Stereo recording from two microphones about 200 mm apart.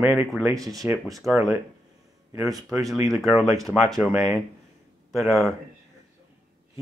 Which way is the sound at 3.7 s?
5° left (ahead or behind).